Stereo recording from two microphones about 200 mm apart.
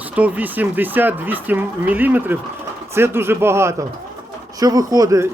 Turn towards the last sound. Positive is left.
turn(degrees=-15)  # may be behind; listen again after turning